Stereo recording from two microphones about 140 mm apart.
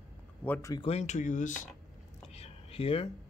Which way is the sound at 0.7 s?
45° left (ahead or behind).